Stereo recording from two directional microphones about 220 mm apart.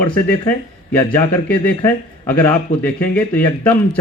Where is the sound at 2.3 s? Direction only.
10° left (ahead or behind).